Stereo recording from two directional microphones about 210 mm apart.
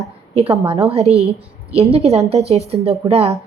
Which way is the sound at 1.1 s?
15° left (ahead or behind).